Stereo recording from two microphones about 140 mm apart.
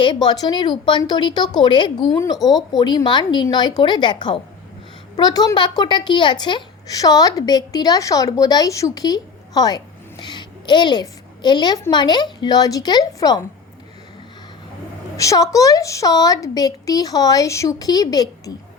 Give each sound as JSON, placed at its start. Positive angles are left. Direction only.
{"t": 0.0, "sound": "a woman's voice", "side_deg": 35}
{"t": 15.1, "sound": "a woman's voice", "side_deg": 25}